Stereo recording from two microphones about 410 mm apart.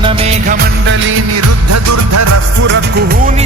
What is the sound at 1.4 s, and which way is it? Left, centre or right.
Music, right.